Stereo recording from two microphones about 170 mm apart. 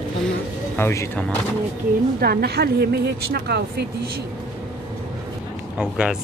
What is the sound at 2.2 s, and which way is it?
A woman's voice, 65° right (ahead or behind).